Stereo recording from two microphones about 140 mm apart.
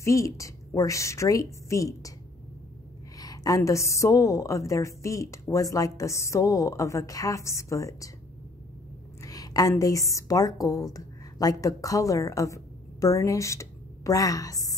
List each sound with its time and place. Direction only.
0.0 s a woman's voice: 20° left (ahead or behind)
3.2 s a sound: 25° left (ahead or behind)
3.9 s a woman's voice: 25° left (ahead or behind)
9.2 s a woman's voice: 25° left (ahead or behind)